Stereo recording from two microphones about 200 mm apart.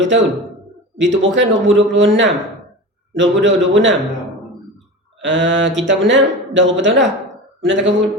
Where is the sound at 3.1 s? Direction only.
65° right (ahead or behind).